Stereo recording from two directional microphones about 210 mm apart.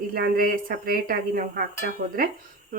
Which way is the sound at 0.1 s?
45° right (ahead or behind).